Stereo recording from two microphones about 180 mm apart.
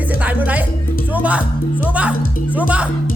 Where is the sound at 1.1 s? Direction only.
10° right (ahead or behind).